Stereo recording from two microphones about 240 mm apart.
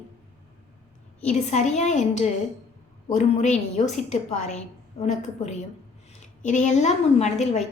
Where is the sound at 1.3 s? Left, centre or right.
Left.